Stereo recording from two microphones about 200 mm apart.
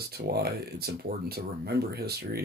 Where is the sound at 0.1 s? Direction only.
50° right (ahead or behind).